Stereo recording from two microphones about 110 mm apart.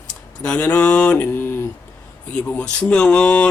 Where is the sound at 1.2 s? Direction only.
20° left (ahead or behind).